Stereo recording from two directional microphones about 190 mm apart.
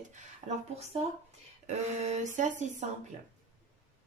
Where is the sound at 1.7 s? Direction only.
35° right (ahead or behind).